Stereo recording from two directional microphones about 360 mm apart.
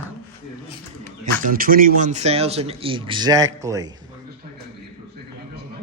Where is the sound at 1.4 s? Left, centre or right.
Right.